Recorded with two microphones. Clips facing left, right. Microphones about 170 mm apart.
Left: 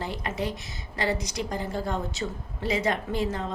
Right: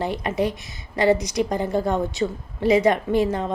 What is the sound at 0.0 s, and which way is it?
A woman's voice, 15° right (ahead or behind).